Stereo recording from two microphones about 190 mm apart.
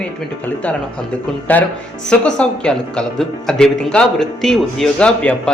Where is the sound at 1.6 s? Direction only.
10° left (ahead or behind).